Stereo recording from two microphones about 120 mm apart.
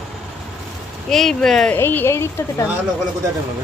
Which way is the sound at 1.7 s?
20° left (ahead or behind).